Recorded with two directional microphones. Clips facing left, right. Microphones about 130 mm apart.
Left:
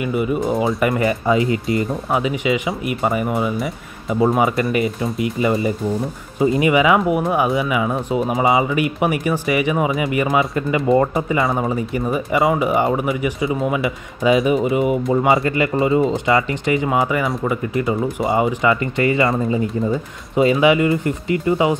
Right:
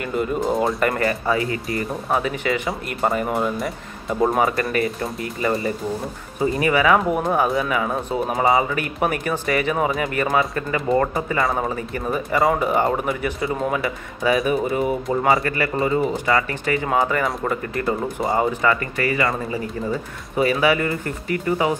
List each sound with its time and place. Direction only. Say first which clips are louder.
0.0 s speech: left 3 dB; 10° left (ahead or behind)
11.4 s speech: left 2 dB; centre (ahead or behind)
11.7 s speech: left 4 dB; 15° left (ahead or behind)
13.8 s speech: left 4 dB; 20° left (ahead or behind)
18.6 s speech: left 3 dB; 20° left (ahead or behind)